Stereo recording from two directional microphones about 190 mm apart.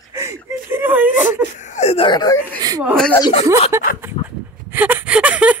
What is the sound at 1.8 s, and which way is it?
Wail, 30° left (ahead or behind).